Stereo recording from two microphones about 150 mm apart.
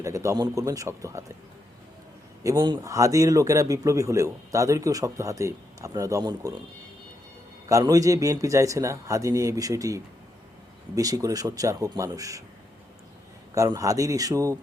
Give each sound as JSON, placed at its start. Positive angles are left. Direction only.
{"t": 0.0, "sound": "a man's voice", "side_deg": -20}
{"t": 2.4, "sound": "a man's voice", "side_deg": -25}
{"t": 7.7, "sound": "a man's voice", "side_deg": -25}
{"t": 13.5, "sound": "a man's voice", "side_deg": -20}